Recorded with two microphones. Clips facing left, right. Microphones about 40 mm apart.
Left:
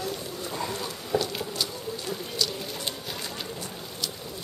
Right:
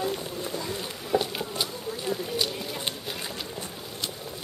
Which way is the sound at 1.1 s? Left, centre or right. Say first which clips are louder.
Right 1 dB; right.